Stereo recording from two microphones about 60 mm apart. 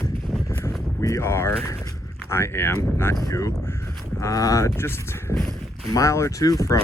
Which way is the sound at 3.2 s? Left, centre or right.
Left.